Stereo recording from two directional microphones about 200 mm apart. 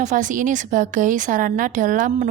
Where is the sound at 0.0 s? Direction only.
40° right (ahead or behind).